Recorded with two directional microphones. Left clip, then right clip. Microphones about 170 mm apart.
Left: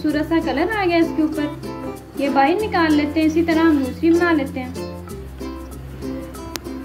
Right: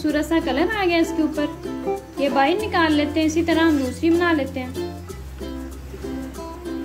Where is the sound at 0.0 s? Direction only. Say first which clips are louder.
Left 1 dB; 15° right (ahead or behind).